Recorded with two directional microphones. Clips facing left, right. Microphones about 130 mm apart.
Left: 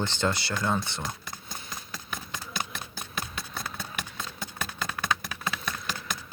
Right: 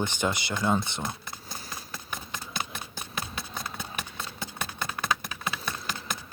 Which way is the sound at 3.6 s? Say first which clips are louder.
Left 1 dB; 15° right (ahead or behind).